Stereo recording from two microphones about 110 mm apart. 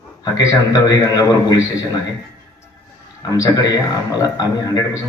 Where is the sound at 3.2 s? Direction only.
35° left (ahead or behind).